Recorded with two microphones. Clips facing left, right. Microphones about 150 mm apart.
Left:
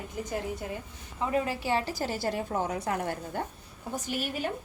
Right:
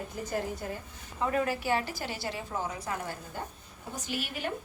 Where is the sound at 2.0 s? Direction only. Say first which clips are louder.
Left 6 dB; 45° left (ahead or behind); by 3.5 s 60° left (ahead or behind).